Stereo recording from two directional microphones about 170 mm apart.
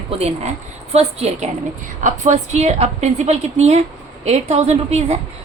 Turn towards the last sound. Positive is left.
turn(degrees=-40)  # may be behind; listen again after turning